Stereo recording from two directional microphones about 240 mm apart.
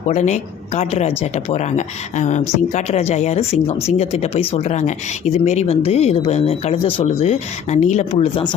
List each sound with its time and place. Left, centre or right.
0.1 s speech: left